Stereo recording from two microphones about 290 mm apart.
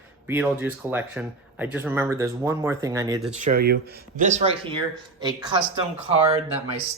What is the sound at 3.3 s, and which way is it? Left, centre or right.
Speech, right.